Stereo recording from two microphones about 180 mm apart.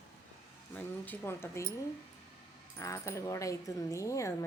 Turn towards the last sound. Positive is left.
turn(degrees=15)  # may be behind; listen again after turning